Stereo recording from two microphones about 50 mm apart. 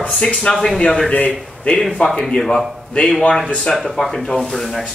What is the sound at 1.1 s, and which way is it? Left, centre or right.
Speech, left.